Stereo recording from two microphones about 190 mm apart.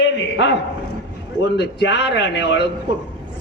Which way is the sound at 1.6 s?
60° left (ahead or behind).